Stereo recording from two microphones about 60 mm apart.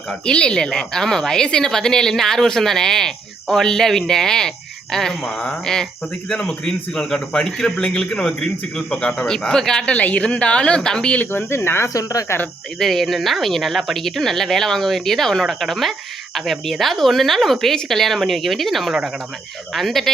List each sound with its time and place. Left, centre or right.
0.3 s a woman's voice: centre
11.3 s speech: left
11.9 s speech: left
12.8 s speech: centre